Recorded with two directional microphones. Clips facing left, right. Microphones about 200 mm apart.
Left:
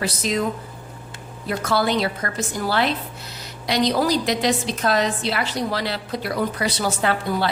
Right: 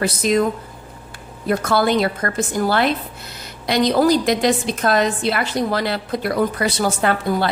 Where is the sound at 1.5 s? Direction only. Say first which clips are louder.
Right 4 dB; 50° right (ahead or behind).